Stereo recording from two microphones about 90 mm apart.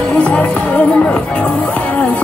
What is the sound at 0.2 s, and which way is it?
Music, 15° left (ahead or behind).